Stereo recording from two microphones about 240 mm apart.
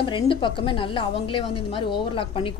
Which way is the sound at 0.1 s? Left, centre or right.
Left.